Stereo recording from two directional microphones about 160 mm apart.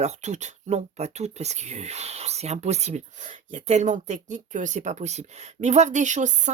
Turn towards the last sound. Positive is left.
turn(degrees=-50)  # may be behind; listen again after turning